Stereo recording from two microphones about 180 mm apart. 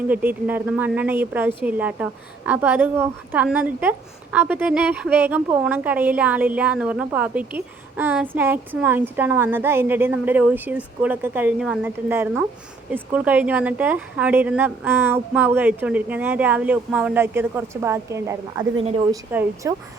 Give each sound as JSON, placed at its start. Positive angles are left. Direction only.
{"t": 0.1, "sound": "speech", "side_deg": -10}
{"t": 18.8, "sound": "a woman's voice", "side_deg": -30}
{"t": 19.1, "sound": "speech", "side_deg": -15}